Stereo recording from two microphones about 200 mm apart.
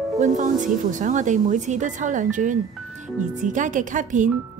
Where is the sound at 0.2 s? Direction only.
40° right (ahead or behind).